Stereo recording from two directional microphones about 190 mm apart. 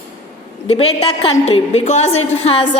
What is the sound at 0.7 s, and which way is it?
A woman's voice, 30° left (ahead or behind).